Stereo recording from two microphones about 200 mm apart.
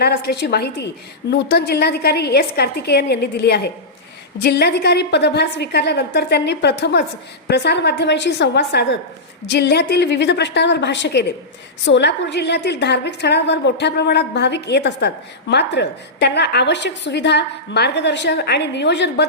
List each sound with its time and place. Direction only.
0.0 s a woman's voice: 50° left (ahead or behind)